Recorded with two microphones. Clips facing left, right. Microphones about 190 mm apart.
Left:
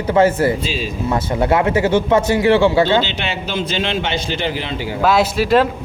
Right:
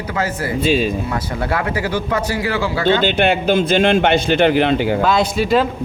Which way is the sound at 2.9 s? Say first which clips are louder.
Right 4 dB; 55° right (ahead or behind).